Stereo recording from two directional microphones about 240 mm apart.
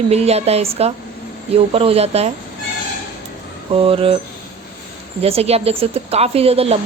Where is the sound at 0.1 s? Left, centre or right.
Right.